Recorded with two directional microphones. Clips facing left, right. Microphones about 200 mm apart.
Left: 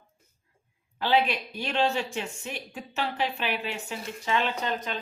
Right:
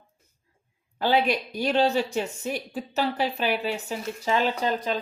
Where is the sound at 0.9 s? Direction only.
45° right (ahead or behind).